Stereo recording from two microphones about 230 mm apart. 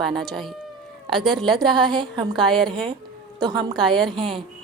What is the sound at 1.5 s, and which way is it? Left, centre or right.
Speech, centre.